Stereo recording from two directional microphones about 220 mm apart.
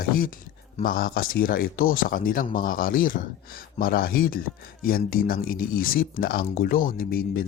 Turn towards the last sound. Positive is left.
turn(degrees=40)  # may be behind; listen again after turning